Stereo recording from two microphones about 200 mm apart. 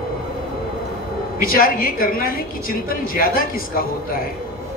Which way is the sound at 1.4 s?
45° left (ahead or behind).